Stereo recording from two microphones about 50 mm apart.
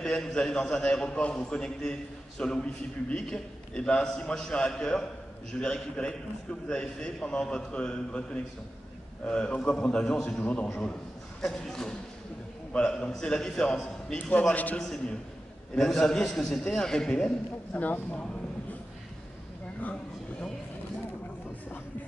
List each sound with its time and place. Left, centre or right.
0.0 s a man's voice: centre
11.5 s a man's voice: centre
14.5 s speech: left
15.7 s a man's voice: centre
17.7 s speech: left
19.8 s a sound: left